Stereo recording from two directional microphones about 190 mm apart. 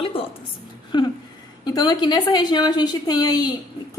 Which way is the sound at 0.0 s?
30° left (ahead or behind).